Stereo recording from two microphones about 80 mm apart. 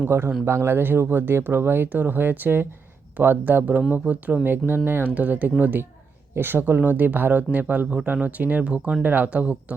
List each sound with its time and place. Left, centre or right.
0.1 s speech: right; by 9.7 s centre